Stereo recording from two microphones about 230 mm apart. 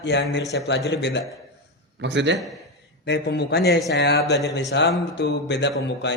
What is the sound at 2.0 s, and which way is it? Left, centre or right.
Speech, right.